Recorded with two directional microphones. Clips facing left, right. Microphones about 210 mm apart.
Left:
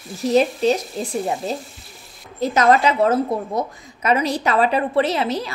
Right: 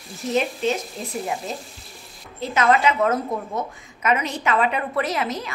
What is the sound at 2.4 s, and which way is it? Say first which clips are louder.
A woman's voice: left 3 dB; 40° left (ahead or behind).